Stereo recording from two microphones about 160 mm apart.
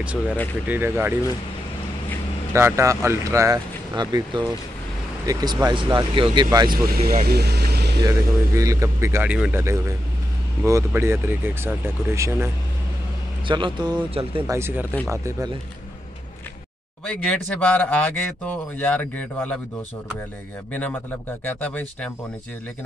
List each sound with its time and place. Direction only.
0.7 s a man's voice: 15° right (ahead or behind)
2.5 s speech: 15° right (ahead or behind)
6.7 s speech: 65° right (ahead or behind)
7.2 s speech: 90° right
8.0 s a man's voice: 20° right (ahead or behind)
13.5 s a man's voice: 30° right (ahead or behind)
14.5 s a man's voice: 15° right (ahead or behind)
17.0 s a man's voice: 5° left (ahead or behind)
20.7 s a man's voice: 10° left (ahead or behind)